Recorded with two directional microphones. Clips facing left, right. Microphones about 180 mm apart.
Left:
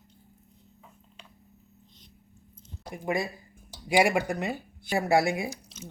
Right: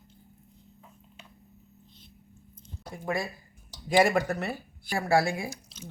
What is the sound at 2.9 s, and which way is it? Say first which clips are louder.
Speech: left 2 dB; 20° left (ahead or behind).